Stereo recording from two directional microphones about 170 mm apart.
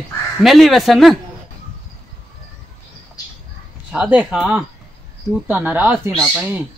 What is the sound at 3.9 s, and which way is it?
Speech, 10° right (ahead or behind).